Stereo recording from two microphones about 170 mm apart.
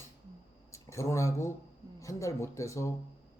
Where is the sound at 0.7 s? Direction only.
15° left (ahead or behind).